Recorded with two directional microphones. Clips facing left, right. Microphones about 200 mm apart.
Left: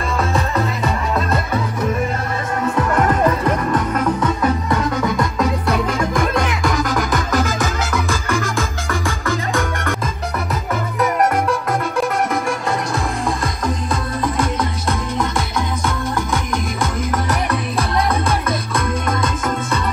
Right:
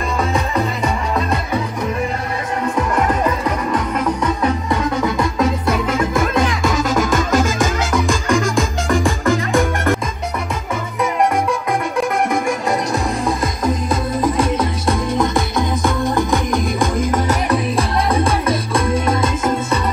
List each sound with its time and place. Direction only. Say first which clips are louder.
3.7 s music: left 1 dB; 10° right (ahead or behind)
6.7 s music: right 2 dB; 20° right (ahead or behind)
12.4 s music: right 2 dB; 20° right (ahead or behind)
16.8 s music: right 3 dB; 25° right (ahead or behind)
19.0 s music: right 3 dB; 10° right (ahead or behind)